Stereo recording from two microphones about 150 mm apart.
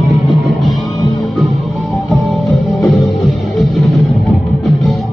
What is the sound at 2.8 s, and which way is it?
Music, centre (ahead or behind).